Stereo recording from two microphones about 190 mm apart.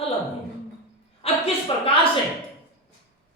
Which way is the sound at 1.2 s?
30° left (ahead or behind).